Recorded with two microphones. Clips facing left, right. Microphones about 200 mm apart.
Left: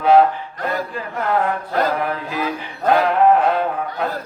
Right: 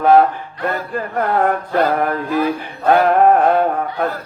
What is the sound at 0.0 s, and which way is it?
Music, 50° right (ahead or behind).